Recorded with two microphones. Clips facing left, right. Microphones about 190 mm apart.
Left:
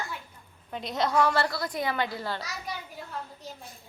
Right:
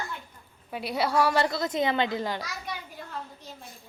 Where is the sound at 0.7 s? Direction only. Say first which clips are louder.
Even; 10° right (ahead or behind).